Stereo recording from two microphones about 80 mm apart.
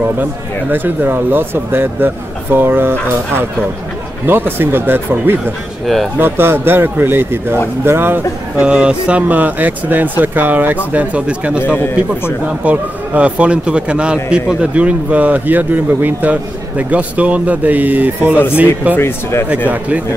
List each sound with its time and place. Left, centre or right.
0.2 s a man's voice: right
8.5 s a man's voice: centre
11.6 s speech: left
12.4 s a man's voice: centre
18.9 s speech: left